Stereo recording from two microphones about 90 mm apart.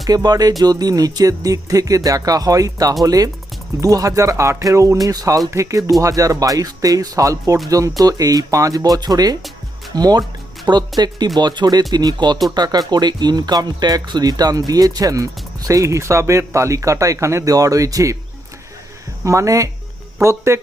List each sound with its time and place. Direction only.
0.0 s speech: 45° right (ahead or behind)
19.2 s speech: 35° right (ahead or behind)